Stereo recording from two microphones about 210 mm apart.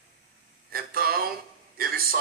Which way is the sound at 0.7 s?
45° right (ahead or behind).